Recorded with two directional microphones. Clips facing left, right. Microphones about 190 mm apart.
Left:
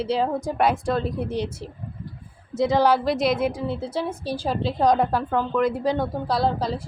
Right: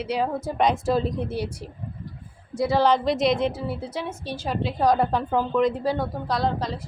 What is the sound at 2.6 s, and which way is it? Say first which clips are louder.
Speech: left 1 dB; 15° left (ahead or behind).